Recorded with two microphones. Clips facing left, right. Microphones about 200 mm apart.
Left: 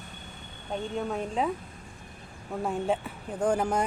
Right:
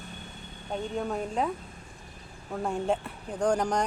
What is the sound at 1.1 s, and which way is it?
Speech, centre (ahead or behind).